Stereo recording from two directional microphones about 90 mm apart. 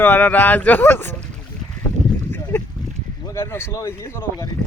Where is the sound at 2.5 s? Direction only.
20° left (ahead or behind).